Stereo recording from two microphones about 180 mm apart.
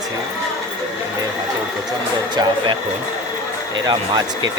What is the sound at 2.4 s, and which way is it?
Speech, 25° right (ahead or behind).